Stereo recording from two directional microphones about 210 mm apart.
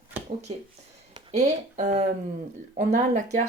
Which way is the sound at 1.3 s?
35° right (ahead or behind).